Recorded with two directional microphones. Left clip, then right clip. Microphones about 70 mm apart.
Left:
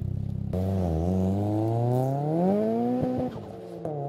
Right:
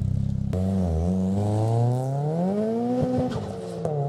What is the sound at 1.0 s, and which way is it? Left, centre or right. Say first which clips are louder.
Vehicle: right 1 dB; centre.